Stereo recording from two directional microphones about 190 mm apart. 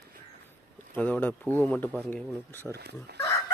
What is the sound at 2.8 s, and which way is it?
Speech, 60° right (ahead or behind).